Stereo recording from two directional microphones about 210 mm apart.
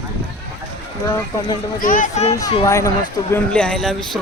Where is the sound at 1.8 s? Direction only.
40° left (ahead or behind).